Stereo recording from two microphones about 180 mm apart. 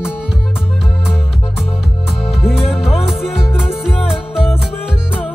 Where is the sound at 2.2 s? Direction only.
Centre (ahead or behind).